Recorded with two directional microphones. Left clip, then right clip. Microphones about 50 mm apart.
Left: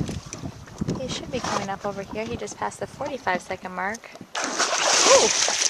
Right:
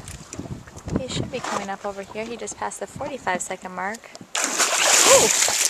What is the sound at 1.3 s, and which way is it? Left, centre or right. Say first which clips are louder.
Speech: left 2 dB; left.